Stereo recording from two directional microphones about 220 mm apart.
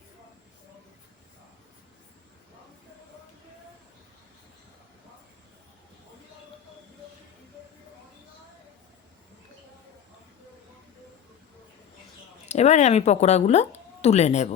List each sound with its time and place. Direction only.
12.5 s speech: 30° left (ahead or behind)